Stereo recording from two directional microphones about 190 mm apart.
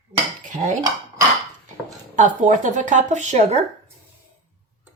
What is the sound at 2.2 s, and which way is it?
A woman's voice, 40° right (ahead or behind).